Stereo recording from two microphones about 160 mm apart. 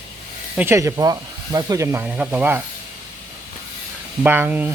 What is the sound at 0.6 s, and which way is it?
Speech, 15° right (ahead or behind).